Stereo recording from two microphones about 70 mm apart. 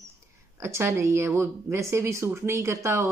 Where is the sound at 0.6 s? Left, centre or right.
Right.